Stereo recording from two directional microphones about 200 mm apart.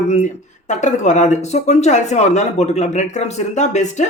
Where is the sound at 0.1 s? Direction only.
35° left (ahead or behind).